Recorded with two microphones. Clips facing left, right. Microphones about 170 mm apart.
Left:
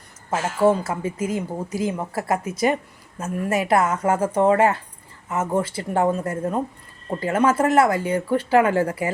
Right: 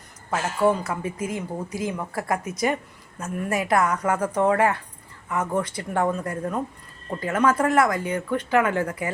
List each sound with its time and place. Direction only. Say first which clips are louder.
0.3 s a woman's voice: left 3 dB; 25° left (ahead or behind)